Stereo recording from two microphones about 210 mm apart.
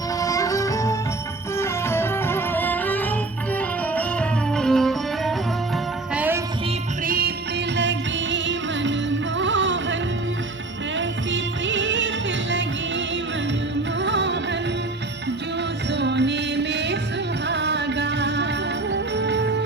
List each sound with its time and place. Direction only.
0.2 s music: 15° left (ahead or behind)
6.1 s music: 10° right (ahead or behind)
7.0 s music: 45° right (ahead or behind)
7.8 s music: 60° right (ahead or behind)
14.0 s music: 55° right (ahead or behind)
15.9 s music: 55° right (ahead or behind)